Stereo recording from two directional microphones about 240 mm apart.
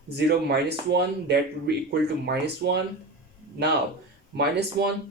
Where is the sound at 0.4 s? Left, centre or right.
Right.